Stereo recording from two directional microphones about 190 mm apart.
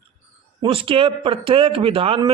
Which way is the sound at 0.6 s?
30° right (ahead or behind).